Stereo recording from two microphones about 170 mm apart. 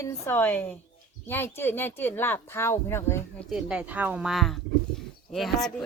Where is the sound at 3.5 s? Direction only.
5° right (ahead or behind).